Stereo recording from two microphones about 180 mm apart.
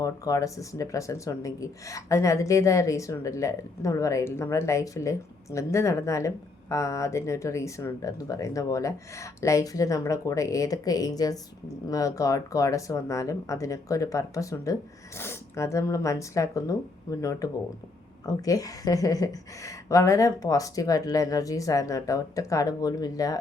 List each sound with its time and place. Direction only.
0.0 s speech: 20° left (ahead or behind)